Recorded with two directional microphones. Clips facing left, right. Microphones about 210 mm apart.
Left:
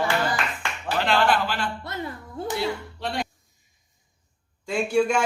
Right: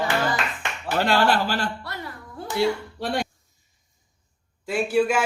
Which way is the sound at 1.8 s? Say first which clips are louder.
Left 3 dB; 20° left (ahead or behind).